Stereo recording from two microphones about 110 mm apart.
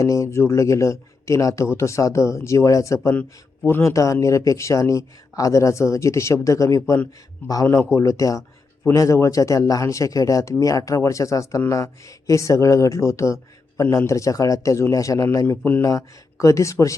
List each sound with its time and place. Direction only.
0.0 s a man's voice: 30° left (ahead or behind)